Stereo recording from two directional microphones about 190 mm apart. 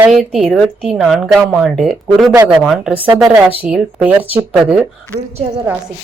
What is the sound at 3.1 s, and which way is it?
Speech, 20° right (ahead or behind).